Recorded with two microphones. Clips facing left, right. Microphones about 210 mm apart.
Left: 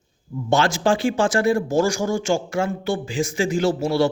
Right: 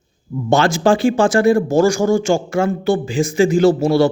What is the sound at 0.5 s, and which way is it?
A man's voice, 50° right (ahead or behind).